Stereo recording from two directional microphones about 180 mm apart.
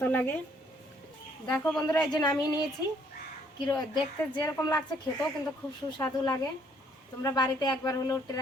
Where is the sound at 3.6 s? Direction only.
25° left (ahead or behind).